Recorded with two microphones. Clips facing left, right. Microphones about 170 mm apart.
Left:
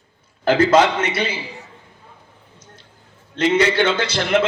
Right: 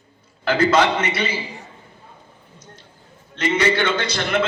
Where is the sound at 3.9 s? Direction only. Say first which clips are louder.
Left 3 dB; 85° left.